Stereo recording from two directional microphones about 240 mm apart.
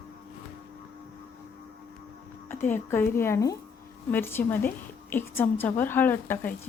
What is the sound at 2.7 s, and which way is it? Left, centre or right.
A woman's voice, centre.